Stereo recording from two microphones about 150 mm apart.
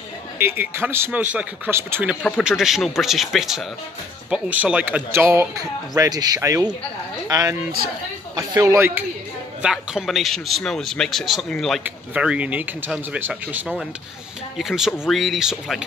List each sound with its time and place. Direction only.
0.4 s speech: 15° right (ahead or behind)
2.4 s speech: centre (ahead or behind)
5.9 s speech: 25° right (ahead or behind)
9.6 s speech: 5° right (ahead or behind)
11.8 s speech: 10° right (ahead or behind)